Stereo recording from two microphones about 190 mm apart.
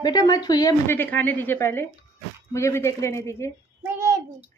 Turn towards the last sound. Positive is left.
turn(degrees=-15)  # may be behind; listen again after turning